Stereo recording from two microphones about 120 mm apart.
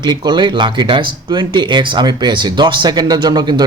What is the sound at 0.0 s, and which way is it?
Speech, 35° right (ahead or behind).